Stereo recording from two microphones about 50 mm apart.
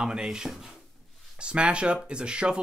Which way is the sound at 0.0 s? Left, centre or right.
Centre.